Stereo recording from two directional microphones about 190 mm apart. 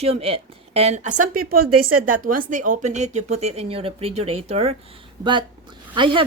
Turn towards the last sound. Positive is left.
turn(degrees=-25)  # may be behind; listen again after turning